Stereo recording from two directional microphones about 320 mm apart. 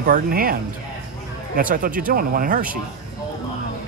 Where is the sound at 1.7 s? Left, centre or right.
Right.